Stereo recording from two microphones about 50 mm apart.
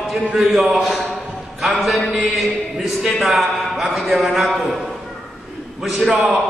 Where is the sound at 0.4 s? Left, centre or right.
Centre.